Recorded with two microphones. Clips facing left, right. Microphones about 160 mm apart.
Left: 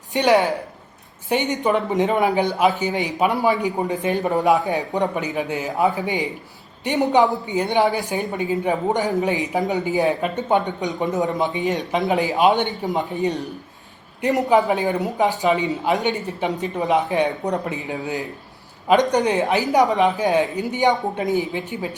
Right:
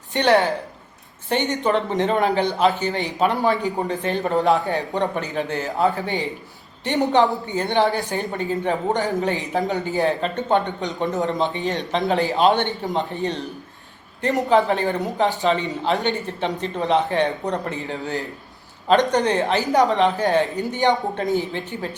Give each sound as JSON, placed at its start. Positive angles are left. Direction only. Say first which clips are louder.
{"t": 0.1, "sound": "speech", "louder": "left 1 dB", "side_deg": 15}
{"t": 12.6, "sound": "speech", "louder": "left 1 dB", "side_deg": 5}
{"t": 14.5, "sound": "speech", "louder": "right 1 dB", "side_deg": 15}